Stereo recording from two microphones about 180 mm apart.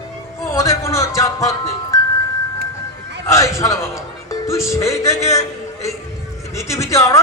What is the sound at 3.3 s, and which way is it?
A man's voice, 15° left (ahead or behind).